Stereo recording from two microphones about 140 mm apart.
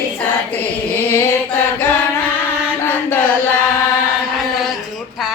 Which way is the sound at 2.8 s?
15° left (ahead or behind).